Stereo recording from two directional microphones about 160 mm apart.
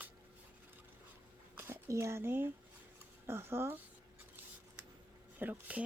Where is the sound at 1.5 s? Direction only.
15° right (ahead or behind).